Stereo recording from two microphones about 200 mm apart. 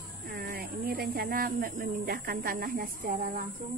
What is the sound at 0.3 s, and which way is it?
Speech, 45° right (ahead or behind).